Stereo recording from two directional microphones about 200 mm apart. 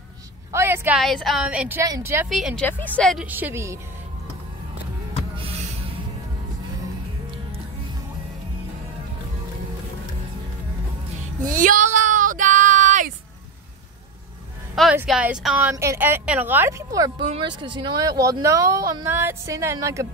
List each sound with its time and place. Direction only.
0.5 s speech: 10° right (ahead or behind)
2.2 s a woman's voice: centre (ahead or behind)
3.3 s speech: 10° right (ahead or behind)
5.3 s a sound: 30° right (ahead or behind)
11.4 s a sound: 40° right (ahead or behind)
14.8 s speech: centre (ahead or behind)